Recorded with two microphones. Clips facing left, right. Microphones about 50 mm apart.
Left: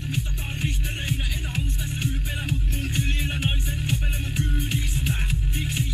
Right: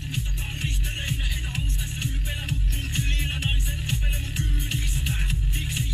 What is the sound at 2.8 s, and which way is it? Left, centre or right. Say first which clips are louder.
Music: left 2 dB; left.